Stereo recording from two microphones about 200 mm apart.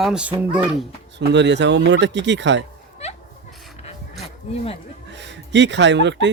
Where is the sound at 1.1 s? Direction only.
60° right (ahead or behind).